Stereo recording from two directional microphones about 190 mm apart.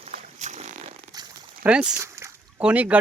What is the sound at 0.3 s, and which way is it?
Vehicle, 35° right (ahead or behind).